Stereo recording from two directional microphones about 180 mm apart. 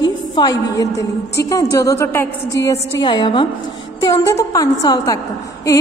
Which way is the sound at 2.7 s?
25° left (ahead or behind).